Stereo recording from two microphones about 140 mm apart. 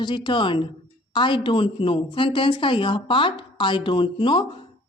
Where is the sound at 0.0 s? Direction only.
35° left (ahead or behind).